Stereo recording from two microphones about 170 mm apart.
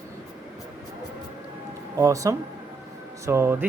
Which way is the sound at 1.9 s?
20° right (ahead or behind).